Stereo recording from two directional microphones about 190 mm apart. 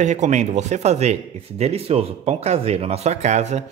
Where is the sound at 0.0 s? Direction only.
40° right (ahead or behind).